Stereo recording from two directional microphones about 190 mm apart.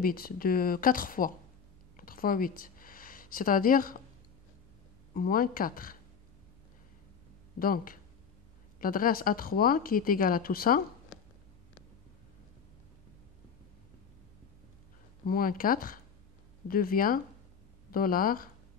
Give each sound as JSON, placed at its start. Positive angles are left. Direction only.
{"t": 0.0, "sound": "speech", "side_deg": 50}
{"t": 2.0, "sound": "a sound", "side_deg": 50}
{"t": 5.1, "sound": "speech", "side_deg": 50}
{"t": 7.5, "sound": "speech", "side_deg": 50}
{"t": 15.2, "sound": "speech", "side_deg": 50}